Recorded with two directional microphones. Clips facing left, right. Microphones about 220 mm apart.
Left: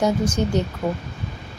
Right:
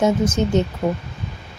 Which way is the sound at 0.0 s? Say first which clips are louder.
Right 3 dB; 20° right (ahead or behind).